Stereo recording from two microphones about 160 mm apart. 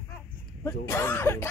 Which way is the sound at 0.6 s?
15° left (ahead or behind).